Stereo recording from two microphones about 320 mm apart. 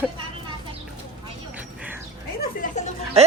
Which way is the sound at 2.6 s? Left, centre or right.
Left.